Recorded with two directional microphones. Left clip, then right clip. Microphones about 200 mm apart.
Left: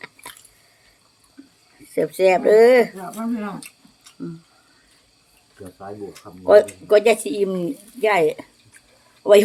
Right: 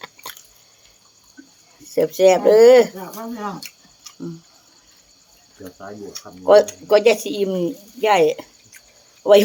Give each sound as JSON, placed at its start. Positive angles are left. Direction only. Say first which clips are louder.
{"t": 0.0, "sound": "drip", "louder": "right 3 dB", "side_deg": -10}
{"t": 1.9, "sound": "speech", "louder": "right 3 dB", "side_deg": -5}
{"t": 6.4, "sound": "speech", "louder": "right 1 dB", "side_deg": -5}